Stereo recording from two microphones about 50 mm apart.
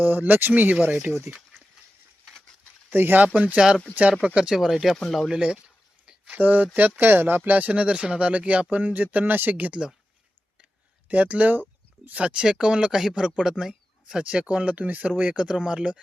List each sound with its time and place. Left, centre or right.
0.0 s speech: right
2.9 s speech: right
3.3 s speech: right
4.4 s speech: centre
4.6 s speech: centre
5.3 s a sound: centre
6.3 s speech: right
11.1 s speech: right
15.4 s speech: centre